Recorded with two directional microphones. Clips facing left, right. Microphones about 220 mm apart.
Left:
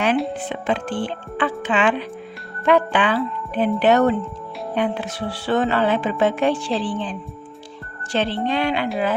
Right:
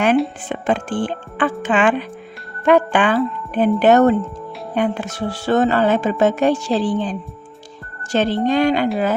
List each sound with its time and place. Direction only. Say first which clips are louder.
0.3 s music: right 3 dB; 50° right (ahead or behind)